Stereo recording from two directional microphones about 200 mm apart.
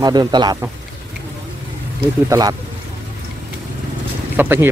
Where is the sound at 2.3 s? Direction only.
15° right (ahead or behind).